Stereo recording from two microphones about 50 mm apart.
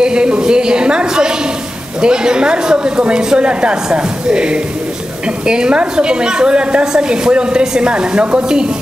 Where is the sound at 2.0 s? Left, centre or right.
Centre.